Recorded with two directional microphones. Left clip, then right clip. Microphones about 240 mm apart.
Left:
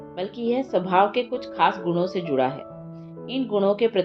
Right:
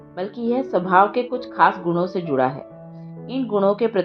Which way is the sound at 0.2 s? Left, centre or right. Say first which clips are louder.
Right 2 dB; centre.